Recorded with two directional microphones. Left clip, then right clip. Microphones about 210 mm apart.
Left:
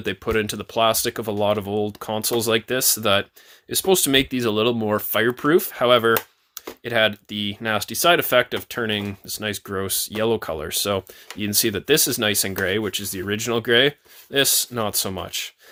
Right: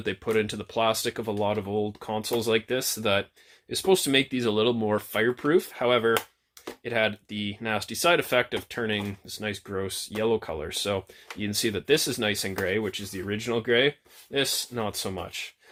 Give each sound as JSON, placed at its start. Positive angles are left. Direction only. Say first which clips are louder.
{"t": 0.0, "sound": "speech", "louder": "left 3 dB", "side_deg": 35}